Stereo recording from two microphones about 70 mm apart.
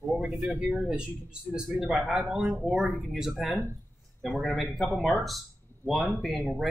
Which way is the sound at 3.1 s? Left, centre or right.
Centre.